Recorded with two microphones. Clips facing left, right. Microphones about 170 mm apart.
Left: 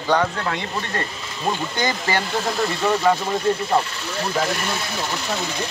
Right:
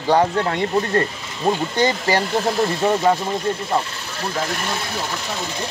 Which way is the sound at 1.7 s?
30° right (ahead or behind).